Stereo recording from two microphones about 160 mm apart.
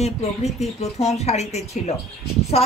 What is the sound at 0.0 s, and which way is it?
Speech, 45° left (ahead or behind).